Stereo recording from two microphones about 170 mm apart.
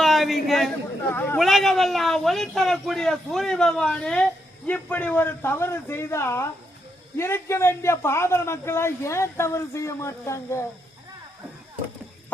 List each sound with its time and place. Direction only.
0.0 s a sound: centre (ahead or behind)
1.1 s a man's voice: 10° left (ahead or behind)
1.4 s a man's voice: centre (ahead or behind); by 10.7 s 15° left (ahead or behind)